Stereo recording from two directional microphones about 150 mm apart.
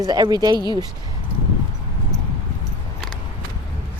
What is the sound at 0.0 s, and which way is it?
Speech, 25° right (ahead or behind).